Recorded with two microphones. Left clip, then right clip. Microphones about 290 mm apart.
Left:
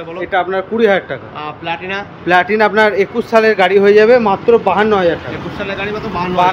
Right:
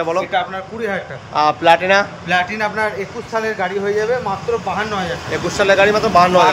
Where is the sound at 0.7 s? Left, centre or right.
Left.